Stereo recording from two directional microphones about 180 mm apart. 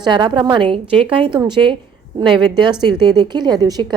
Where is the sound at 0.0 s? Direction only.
25° right (ahead or behind).